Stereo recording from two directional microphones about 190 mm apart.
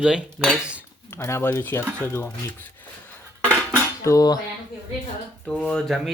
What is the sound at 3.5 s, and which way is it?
Cutlery, 15° left (ahead or behind).